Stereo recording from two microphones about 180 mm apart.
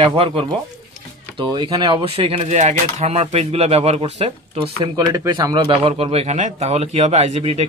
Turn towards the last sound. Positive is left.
turn(degrees=-35)  # may be behind; listen again after turning